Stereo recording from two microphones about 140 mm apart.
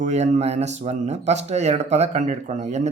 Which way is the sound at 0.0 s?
55° right (ahead or behind).